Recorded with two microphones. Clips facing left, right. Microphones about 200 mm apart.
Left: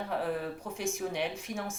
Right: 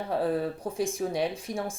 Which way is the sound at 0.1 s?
35° right (ahead or behind).